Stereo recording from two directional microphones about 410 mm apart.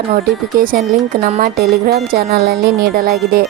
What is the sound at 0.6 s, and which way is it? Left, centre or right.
Speech, centre.